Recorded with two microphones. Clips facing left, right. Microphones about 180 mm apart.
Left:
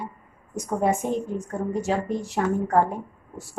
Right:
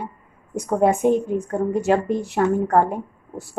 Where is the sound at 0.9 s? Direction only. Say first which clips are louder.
Right 7 dB; 60° right (ahead or behind).